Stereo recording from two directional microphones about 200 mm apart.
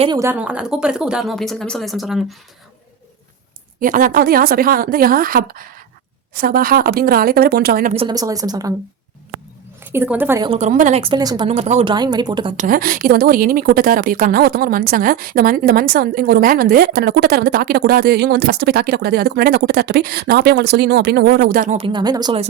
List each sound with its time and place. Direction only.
0.0 s speech: 20° right (ahead or behind); by 2.2 s centre (ahead or behind)
3.8 s a woman's voice: 40° right (ahead or behind)
7.9 s speech: 20° right (ahead or behind)
9.8 s a woman's voice: 10° right (ahead or behind)
10.5 s speech: 35° right (ahead or behind)
11.0 s speech: 20° right (ahead or behind)
11.4 s speech: 30° right (ahead or behind)
12.5 s a woman's voice: 45° right (ahead or behind)
21.8 s speech: 25° right (ahead or behind)